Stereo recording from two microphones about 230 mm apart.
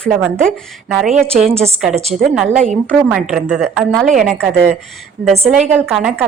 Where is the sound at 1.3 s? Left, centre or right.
Right.